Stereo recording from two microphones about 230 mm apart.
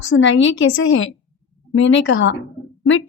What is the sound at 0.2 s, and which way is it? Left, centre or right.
Speech, left.